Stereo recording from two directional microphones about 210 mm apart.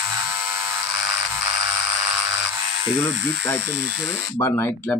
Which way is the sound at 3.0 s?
5° left (ahead or behind).